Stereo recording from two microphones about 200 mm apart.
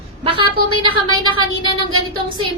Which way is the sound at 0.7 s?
90° right.